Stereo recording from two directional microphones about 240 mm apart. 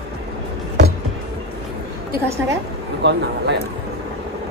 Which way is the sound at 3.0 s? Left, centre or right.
Right.